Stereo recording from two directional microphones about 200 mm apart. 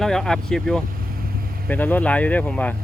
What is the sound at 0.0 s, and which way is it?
Speech, centre (ahead or behind).